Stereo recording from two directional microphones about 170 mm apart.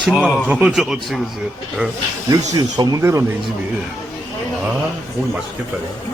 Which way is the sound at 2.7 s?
20° right (ahead or behind).